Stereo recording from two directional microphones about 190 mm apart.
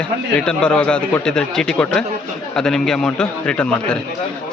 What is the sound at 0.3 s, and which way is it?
A man's voice, 5° left (ahead or behind).